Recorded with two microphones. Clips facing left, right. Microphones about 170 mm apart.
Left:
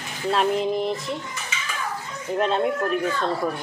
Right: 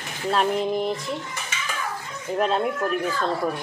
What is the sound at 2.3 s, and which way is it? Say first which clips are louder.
Speech: left 1 dB; centre (ahead or behind).